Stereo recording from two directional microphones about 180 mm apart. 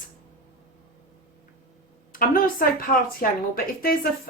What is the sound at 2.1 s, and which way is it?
A woman's voice, 50° left (ahead or behind).